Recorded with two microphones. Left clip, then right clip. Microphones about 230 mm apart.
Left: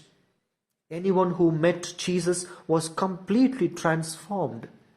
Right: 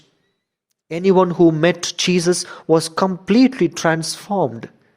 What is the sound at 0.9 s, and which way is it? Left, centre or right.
Speech, right.